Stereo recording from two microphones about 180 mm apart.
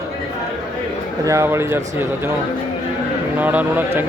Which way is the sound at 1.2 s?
15° right (ahead or behind).